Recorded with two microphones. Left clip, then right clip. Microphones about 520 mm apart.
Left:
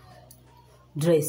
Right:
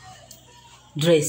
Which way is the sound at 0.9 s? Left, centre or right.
Left.